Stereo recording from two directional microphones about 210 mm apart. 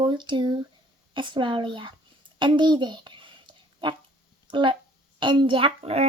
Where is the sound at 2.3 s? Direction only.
25° right (ahead or behind).